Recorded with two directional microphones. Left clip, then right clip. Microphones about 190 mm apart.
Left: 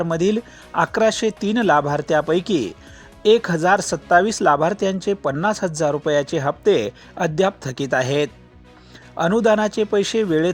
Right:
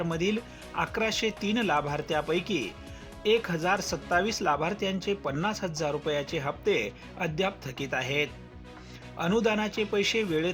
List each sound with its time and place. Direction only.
0.0 s speech: 45° left (ahead or behind)